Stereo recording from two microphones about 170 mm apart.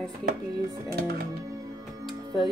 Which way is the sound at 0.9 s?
70° right (ahead or behind).